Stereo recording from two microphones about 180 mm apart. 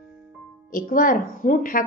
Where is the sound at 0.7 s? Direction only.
50° left (ahead or behind).